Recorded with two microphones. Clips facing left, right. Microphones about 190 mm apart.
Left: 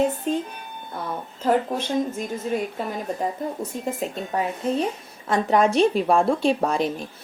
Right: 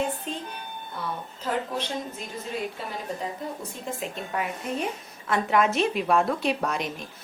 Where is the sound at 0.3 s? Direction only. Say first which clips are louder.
Left 10 dB; 45° left (ahead or behind).